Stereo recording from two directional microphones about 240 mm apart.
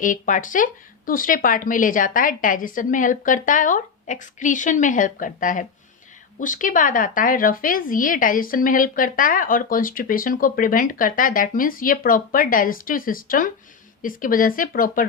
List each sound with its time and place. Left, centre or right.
0.0 s a woman's voice: left